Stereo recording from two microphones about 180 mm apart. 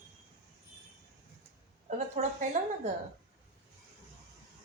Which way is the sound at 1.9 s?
45° right (ahead or behind).